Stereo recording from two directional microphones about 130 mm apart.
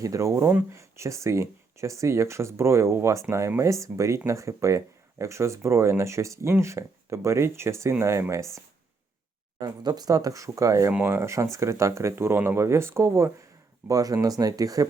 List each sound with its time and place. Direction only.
0.0 s speech: 25° right (ahead or behind)
9.6 s speech: 30° right (ahead or behind)